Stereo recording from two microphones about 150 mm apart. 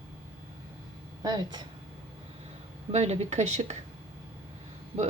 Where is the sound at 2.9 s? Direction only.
45° right (ahead or behind).